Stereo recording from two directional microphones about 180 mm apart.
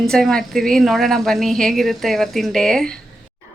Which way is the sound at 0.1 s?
5° left (ahead or behind).